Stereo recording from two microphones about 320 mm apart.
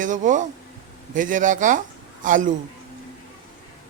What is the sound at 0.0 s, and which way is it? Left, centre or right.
Speech, right.